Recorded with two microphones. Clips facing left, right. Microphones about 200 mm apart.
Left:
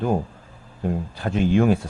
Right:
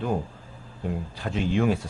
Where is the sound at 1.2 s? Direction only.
50° left (ahead or behind).